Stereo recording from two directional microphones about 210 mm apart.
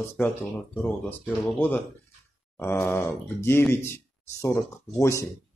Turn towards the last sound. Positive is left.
turn(degrees=10)  # may be behind; listen again after turning